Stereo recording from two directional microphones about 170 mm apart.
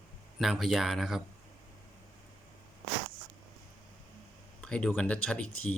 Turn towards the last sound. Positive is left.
turn(degrees=5)  # may be behind; listen again after turning